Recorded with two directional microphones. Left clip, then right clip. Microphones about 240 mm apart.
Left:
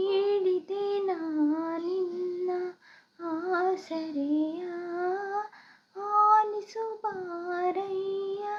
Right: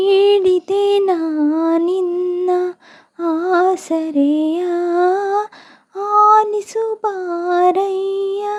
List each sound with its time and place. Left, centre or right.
0.0 s child singing: right
2.5 s humming: right
3.2 s female singing: right
5.9 s female singing: right
6.2 s female singing: right